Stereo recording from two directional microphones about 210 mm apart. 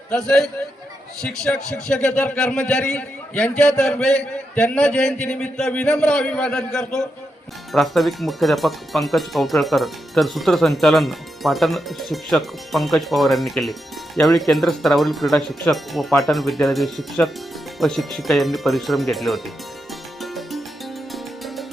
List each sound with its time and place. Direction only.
0.1 s speech: centre (ahead or behind)
20.2 s music: centre (ahead or behind)